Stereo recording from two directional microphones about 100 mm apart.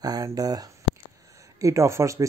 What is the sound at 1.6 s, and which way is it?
Speech, 30° right (ahead or behind).